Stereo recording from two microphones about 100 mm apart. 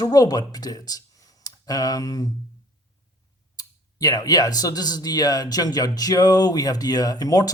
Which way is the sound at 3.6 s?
40° left (ahead or behind).